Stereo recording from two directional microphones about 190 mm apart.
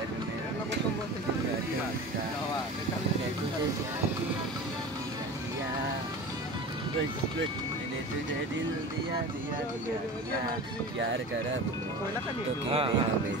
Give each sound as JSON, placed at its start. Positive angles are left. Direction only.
{"t": 12.6, "sound": "speech", "side_deg": -30}